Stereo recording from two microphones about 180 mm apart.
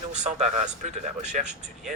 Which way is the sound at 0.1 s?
40° right (ahead or behind).